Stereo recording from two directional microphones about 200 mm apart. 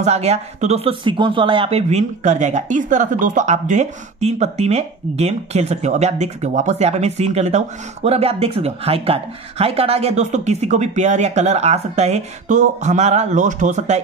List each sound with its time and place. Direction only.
0.0 s speech: 35° right (ahead or behind)